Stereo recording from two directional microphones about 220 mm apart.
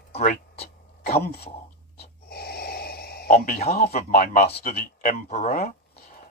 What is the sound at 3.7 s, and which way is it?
Speech, 45° left (ahead or behind).